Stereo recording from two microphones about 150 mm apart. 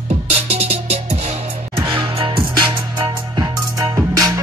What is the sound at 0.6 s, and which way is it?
Music, 45° right (ahead or behind).